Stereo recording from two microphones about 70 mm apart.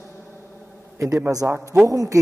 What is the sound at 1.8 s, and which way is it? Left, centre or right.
Speech, right.